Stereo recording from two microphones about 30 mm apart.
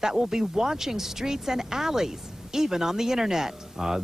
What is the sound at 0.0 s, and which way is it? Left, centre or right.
Speech, centre.